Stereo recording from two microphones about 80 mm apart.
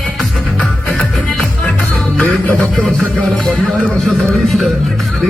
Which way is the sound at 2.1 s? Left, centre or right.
Centre.